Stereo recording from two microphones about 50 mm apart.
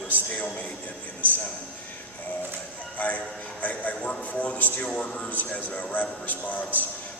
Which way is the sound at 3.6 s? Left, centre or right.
Left.